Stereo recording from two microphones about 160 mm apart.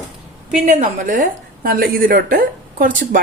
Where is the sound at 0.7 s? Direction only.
45° right (ahead or behind).